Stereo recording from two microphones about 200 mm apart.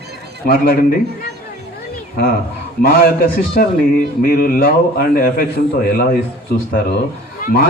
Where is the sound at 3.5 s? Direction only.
50° left (ahead or behind).